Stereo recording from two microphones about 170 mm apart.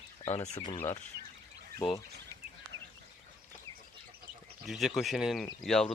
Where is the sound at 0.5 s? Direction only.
25° left (ahead or behind).